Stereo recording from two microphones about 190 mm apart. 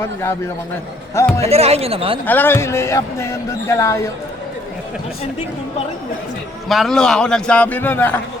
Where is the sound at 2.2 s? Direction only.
10° left (ahead or behind).